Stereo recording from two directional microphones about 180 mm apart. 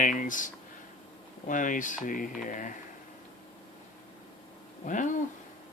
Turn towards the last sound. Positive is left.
turn(degrees=45)  # may be behind; listen again after turning